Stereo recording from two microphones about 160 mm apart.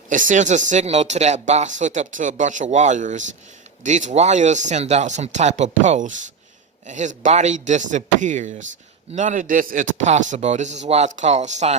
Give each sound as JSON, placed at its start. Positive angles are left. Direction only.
{"t": 0.1, "sound": "speech", "side_deg": -50}